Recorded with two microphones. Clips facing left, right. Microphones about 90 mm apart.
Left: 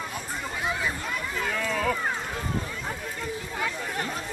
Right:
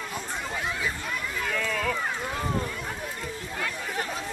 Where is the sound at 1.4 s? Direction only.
10° left (ahead or behind).